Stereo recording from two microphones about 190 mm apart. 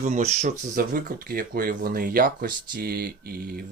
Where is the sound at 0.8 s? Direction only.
50° right (ahead or behind).